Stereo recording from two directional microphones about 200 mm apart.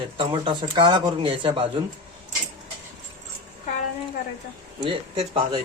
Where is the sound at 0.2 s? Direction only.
25° right (ahead or behind).